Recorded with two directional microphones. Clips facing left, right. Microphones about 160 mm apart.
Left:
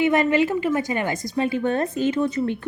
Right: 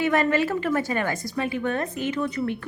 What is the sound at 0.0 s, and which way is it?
A woman's voice, 15° left (ahead or behind).